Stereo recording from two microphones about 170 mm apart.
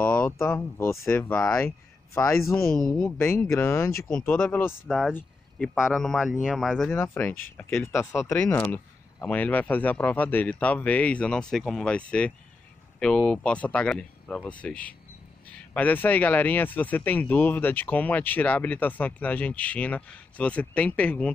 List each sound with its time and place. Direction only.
0.0 s speech: 10° left (ahead or behind)
2.1 s speech: 15° left (ahead or behind)
4.8 s speech: centre (ahead or behind)
6.9 s speech: 10° left (ahead or behind)
13.3 s speech: 5° left (ahead or behind)